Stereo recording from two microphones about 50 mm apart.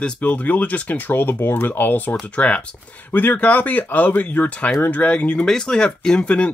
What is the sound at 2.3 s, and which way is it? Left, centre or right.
Speech, left.